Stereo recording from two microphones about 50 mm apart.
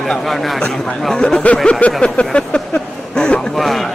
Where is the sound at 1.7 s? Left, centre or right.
Left.